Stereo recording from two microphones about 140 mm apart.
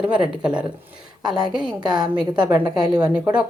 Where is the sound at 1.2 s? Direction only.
30° right (ahead or behind).